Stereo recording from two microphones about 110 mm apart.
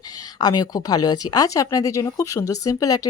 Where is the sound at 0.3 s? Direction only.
40° left (ahead or behind).